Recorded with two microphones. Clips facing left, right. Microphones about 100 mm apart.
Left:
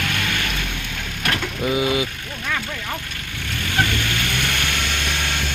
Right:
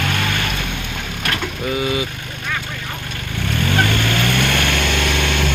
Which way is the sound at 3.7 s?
55° right (ahead or behind).